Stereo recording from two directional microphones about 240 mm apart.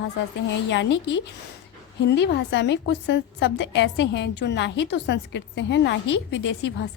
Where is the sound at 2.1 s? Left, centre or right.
Left.